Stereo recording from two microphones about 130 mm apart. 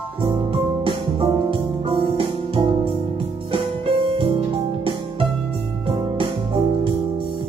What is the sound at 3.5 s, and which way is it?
Piano, 45° right (ahead or behind).